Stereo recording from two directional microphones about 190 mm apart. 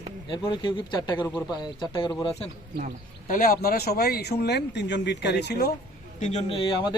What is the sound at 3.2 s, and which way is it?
Speech, 45° left (ahead or behind).